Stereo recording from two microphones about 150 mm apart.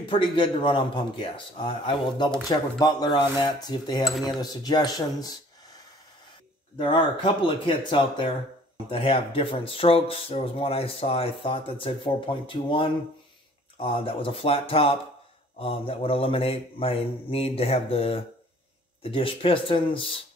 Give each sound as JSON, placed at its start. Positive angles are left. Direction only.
{"t": 0.1, "sound": "speech", "side_deg": 35}
{"t": 6.8, "sound": "speech", "side_deg": 35}